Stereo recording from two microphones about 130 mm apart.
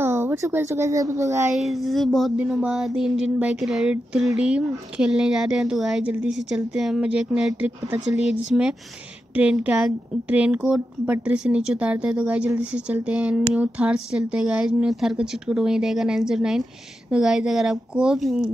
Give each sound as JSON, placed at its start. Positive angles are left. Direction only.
{"t": 0.0, "sound": "speech", "side_deg": -15}
{"t": 1.5, "sound": "speech", "side_deg": 0}